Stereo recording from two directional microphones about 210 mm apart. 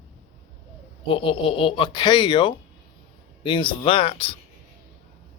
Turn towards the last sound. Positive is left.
turn(degrees=25)  # may be behind; listen again after turning